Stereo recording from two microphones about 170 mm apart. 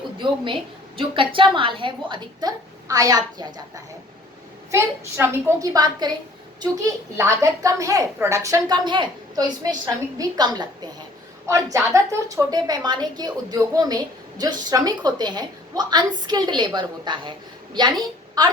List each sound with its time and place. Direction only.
0.2 s a woman's voice: 30° right (ahead or behind)
4.7 s a woman's voice: 15° right (ahead or behind)
7.2 s a woman's voice: 20° right (ahead or behind)